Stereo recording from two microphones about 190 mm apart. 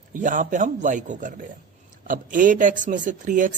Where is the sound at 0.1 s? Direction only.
45° right (ahead or behind).